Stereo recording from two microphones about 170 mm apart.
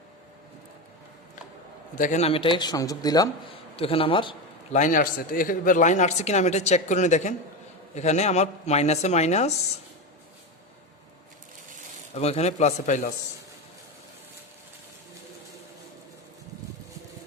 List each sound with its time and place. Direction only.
2.0 s a man's voice: 45° left (ahead or behind); by 3.6 s 25° left (ahead or behind)
3.8 s speech: 35° left (ahead or behind)
4.7 s speech: 50° left (ahead or behind)
12.1 s speech: 40° left (ahead or behind)